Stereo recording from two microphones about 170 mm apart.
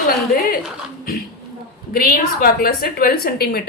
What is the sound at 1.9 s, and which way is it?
A woman's voice, 60° left (ahead or behind).